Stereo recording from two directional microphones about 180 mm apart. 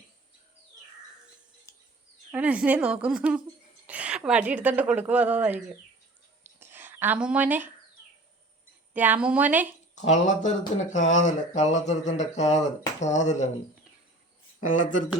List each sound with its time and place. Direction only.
2.3 s a woman's voice: 10° right (ahead or behind)
6.4 s a sound: 10° right (ahead or behind)
8.9 s a woman's voice: 10° right (ahead or behind)
9.9 s speech: 40° left (ahead or behind)
14.6 s speech: 45° left (ahead or behind)